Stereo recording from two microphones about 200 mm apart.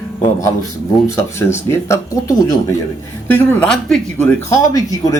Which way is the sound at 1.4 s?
15° left (ahead or behind).